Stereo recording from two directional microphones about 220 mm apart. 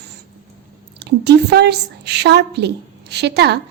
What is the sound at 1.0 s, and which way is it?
A woman's voice, 50° right (ahead or behind).